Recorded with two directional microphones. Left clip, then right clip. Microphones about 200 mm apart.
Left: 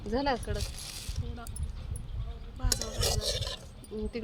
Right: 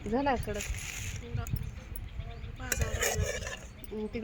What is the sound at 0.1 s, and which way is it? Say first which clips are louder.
Speech: even; 25° right (ahead or behind).